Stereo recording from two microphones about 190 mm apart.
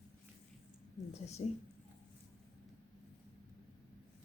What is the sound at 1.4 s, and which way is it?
Speech, 30° left (ahead or behind).